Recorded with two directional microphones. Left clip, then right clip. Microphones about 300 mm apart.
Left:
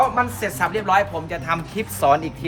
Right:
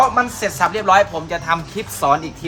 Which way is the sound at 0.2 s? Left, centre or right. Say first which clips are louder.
Right 4 dB; centre.